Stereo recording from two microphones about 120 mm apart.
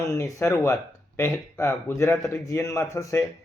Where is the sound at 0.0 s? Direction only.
25° left (ahead or behind).